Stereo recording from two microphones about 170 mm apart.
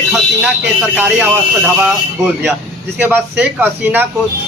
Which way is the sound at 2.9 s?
10° right (ahead or behind).